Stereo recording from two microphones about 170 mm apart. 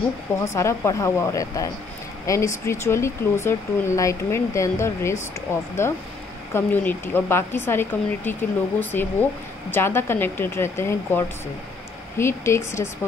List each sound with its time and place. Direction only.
0.6 s speech: 15° left (ahead or behind)